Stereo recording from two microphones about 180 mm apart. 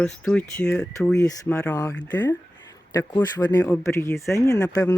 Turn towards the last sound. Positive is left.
turn(degrees=20)  # may be behind; listen again after turning